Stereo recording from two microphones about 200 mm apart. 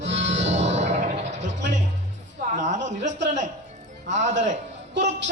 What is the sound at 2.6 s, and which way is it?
A man's voice, 35° right (ahead or behind).